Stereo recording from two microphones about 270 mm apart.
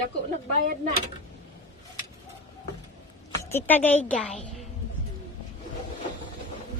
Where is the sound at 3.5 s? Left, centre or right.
Centre.